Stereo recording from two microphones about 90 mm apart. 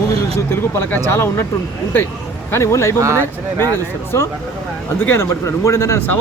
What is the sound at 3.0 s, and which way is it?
Speech, 30° right (ahead or behind).